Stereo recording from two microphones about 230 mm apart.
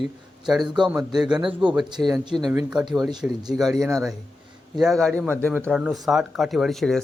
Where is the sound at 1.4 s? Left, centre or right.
Right.